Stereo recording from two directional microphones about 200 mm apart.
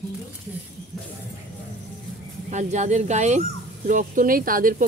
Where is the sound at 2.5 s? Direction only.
35° right (ahead or behind).